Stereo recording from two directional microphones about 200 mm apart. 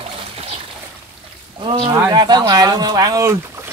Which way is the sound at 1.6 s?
25° right (ahead or behind).